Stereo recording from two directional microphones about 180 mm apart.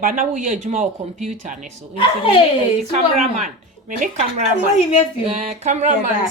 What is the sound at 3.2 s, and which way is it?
Speech, 40° right (ahead or behind).